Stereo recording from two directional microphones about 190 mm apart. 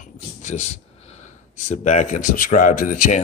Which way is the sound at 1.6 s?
40° left (ahead or behind).